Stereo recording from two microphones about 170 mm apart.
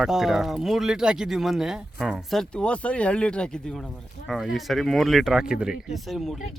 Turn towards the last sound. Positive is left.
turn(degrees=0)  # may be behind; listen again after turning